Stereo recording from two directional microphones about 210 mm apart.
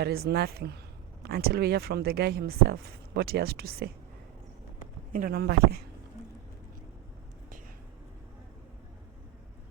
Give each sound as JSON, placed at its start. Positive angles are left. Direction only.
{"t": 0.0, "sound": "speech", "side_deg": -50}
{"t": 5.1, "sound": "speech", "side_deg": -45}